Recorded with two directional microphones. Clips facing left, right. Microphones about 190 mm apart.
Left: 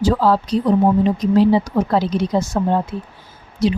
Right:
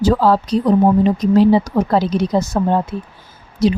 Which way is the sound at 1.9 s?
40° right (ahead or behind).